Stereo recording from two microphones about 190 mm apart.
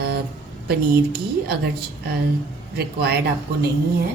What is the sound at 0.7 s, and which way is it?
A woman's voice, 55° right (ahead or behind).